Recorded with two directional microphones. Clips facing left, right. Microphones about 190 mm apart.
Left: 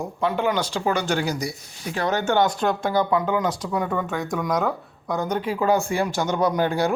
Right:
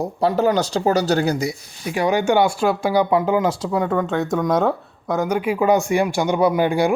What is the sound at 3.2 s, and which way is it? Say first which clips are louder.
Speech: right 4 dB; 30° right (ahead or behind).